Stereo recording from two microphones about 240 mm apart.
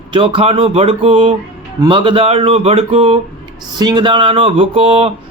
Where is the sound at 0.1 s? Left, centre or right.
Right.